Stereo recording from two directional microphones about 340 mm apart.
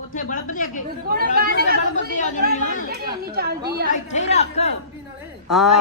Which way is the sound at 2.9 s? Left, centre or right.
Right.